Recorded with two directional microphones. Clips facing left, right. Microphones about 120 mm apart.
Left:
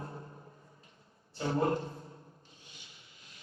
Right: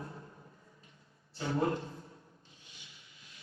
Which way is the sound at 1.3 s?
35° left (ahead or behind).